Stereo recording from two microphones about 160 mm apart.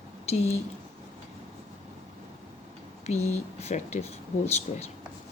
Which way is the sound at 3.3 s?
40° left (ahead or behind).